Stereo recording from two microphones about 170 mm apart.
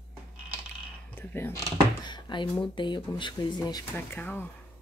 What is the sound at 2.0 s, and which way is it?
Speech, 25° left (ahead or behind).